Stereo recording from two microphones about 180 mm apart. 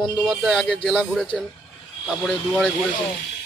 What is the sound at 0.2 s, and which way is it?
Speech, centre (ahead or behind).